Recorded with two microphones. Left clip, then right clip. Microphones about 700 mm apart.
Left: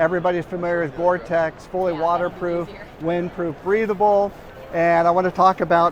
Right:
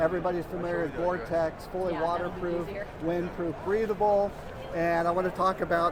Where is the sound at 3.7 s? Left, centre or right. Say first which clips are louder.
Left 8 dB; left.